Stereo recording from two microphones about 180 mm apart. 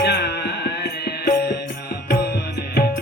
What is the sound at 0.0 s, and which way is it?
Music, 65° left (ahead or behind).